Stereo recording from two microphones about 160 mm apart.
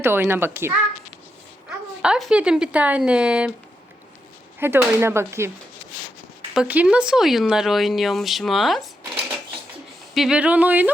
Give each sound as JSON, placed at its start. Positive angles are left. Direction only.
{"t": 0.0, "sound": "speech", "side_deg": -15}
{"t": 2.0, "sound": "speech", "side_deg": 0}
{"t": 4.6, "sound": "speech", "side_deg": -15}
{"t": 6.5, "sound": "speech", "side_deg": -5}
{"t": 10.2, "sound": "speech", "side_deg": -5}